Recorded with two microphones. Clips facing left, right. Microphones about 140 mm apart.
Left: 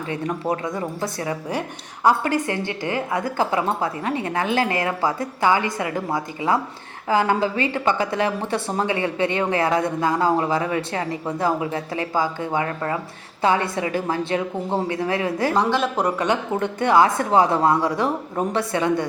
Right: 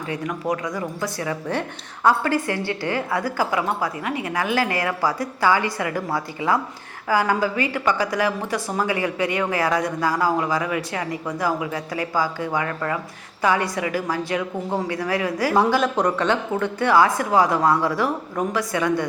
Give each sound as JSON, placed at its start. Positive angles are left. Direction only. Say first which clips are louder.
{"t": 0.1, "sound": "a woman's voice", "louder": "left 1 dB", "side_deg": 30}
{"t": 15.5, "sound": "speech", "louder": "right 4 dB", "side_deg": -5}
{"t": 16.0, "sound": "a woman's voice", "louder": "right 1 dB", "side_deg": 10}